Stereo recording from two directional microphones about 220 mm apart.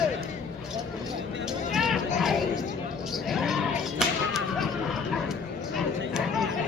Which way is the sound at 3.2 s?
Centre (ahead or behind).